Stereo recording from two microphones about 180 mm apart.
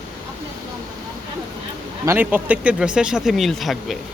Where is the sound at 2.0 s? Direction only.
10° right (ahead or behind).